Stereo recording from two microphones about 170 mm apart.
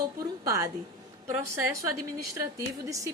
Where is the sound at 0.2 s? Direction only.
20° right (ahead or behind).